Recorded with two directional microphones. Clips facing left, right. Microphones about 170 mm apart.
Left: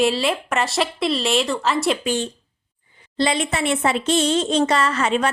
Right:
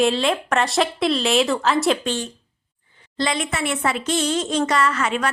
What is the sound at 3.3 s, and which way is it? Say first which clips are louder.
A woman's voice: left 2 dB; 25° left (ahead or behind).